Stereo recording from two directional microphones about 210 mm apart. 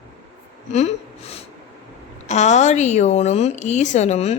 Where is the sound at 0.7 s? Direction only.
30° left (ahead or behind).